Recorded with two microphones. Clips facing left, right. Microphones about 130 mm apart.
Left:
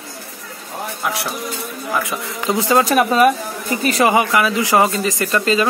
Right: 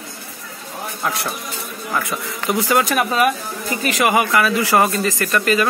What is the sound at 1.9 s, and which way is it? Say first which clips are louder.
Speech: left 1 dB; 20° left (ahead or behind).